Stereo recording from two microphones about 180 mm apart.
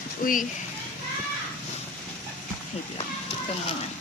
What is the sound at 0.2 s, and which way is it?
Speech, 50° left (ahead or behind).